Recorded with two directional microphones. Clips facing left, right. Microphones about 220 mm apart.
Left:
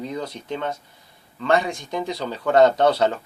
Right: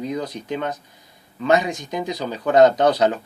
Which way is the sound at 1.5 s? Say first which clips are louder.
Right 2 dB; 20° right (ahead or behind).